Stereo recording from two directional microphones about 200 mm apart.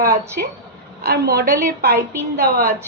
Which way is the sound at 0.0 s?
45° right (ahead or behind).